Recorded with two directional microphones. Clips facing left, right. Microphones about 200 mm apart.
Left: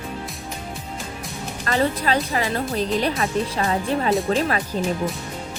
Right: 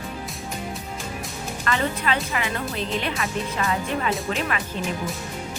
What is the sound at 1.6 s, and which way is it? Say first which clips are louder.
Speech: left 4 dB; 35° left (ahead or behind).